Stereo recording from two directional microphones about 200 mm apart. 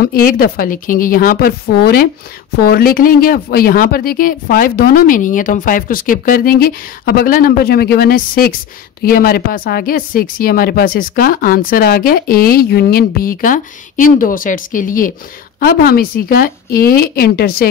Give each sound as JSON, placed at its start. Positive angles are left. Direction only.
{"t": 0.0, "sound": "speech", "side_deg": 50}